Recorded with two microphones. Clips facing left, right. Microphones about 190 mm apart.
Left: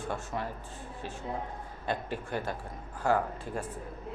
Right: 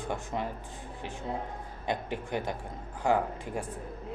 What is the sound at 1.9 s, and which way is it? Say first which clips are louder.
Speech: right 1 dB; 15° right (ahead or behind).